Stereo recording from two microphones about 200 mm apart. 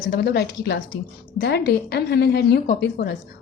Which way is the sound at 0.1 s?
55° left (ahead or behind).